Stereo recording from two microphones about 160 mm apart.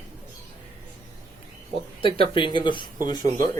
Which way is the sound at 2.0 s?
35° left (ahead or behind).